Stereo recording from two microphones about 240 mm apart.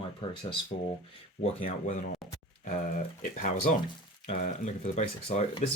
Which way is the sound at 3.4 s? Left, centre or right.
Left.